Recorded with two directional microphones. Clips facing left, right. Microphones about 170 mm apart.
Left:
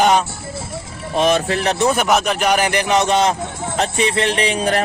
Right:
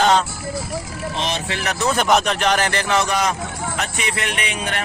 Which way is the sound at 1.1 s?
55° left (ahead or behind).